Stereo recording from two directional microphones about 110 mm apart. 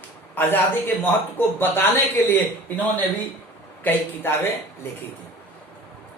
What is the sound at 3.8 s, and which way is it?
Speech, 20° left (ahead or behind).